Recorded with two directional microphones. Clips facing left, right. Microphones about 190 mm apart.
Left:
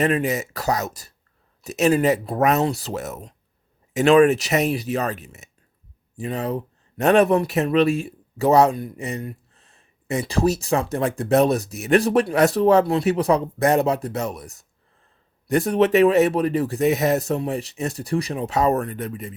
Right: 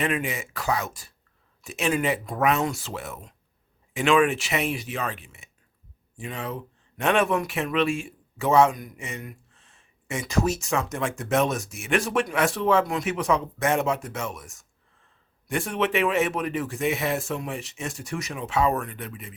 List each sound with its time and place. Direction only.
0.0 s speech: 40° left (ahead or behind)